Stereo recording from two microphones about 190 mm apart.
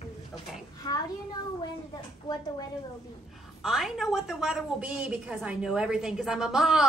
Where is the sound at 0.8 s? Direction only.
20° left (ahead or behind).